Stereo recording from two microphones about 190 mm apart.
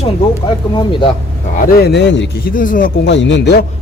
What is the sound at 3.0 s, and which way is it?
Speech, 70° left (ahead or behind).